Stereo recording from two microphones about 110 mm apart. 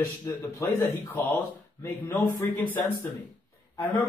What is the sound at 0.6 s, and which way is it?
A man's voice, 25° left (ahead or behind).